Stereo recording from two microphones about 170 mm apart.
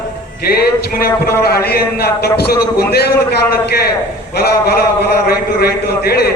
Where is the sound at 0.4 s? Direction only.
65° left (ahead or behind).